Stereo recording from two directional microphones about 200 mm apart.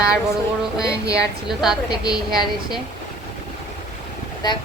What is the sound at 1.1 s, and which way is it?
A woman's voice, 5° right (ahead or behind).